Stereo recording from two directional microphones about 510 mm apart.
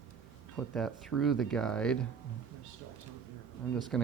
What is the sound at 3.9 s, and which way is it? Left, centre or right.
Speech, centre.